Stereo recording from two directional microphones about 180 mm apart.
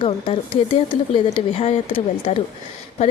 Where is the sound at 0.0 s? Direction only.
30° left (ahead or behind).